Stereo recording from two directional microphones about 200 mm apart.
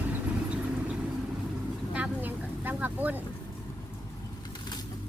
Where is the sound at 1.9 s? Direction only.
10° right (ahead or behind).